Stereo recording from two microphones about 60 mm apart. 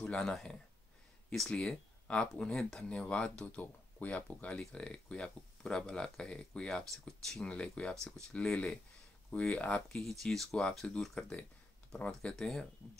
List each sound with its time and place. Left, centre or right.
0.0 s speech: centre
2.0 s speech: centre
7.4 s speech: centre
10.0 s speech: centre